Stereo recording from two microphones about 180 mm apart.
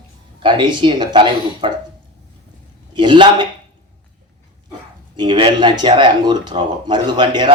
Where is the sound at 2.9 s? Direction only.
25° right (ahead or behind).